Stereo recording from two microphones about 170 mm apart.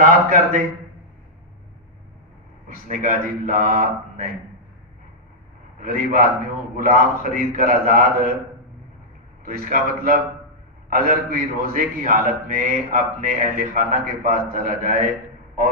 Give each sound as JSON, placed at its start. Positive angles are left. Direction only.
{"t": 0.0, "sound": "a man's voice", "side_deg": -50}
{"t": 2.7, "sound": "a man's voice", "side_deg": -55}
{"t": 5.8, "sound": "a man's voice", "side_deg": -55}
{"t": 9.4, "sound": "a man's voice", "side_deg": -60}